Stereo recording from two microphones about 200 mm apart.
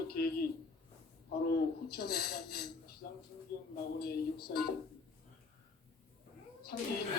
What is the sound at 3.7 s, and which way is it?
Speech, 50° left (ahead or behind).